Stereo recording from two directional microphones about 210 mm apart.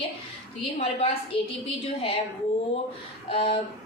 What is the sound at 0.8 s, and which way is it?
A woman's voice, 30° left (ahead or behind).